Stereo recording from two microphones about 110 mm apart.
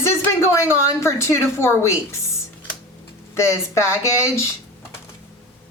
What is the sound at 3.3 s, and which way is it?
A woman's voice, 25° left (ahead or behind).